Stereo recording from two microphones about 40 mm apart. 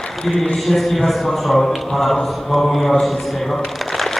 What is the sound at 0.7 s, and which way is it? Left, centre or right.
A man's voice, centre.